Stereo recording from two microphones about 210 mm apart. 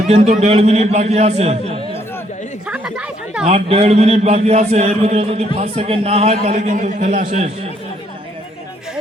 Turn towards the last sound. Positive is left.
turn(degrees=-30)  # may be behind; listen again after turning